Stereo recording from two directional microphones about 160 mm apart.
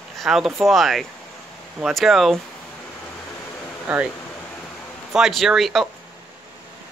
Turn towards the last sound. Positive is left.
turn(degrees=0)  # may be behind; listen again after turning